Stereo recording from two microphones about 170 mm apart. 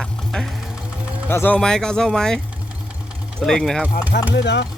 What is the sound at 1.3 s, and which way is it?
Speech, 10° left (ahead or behind).